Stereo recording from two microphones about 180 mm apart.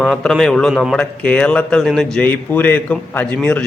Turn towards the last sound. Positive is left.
turn(degrees=5)  # may be behind; listen again after turning